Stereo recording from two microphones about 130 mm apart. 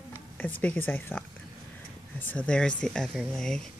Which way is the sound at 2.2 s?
10° left (ahead or behind).